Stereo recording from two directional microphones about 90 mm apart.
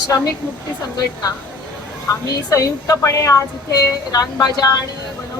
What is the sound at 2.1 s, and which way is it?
A woman's voice, 40° left (ahead or behind).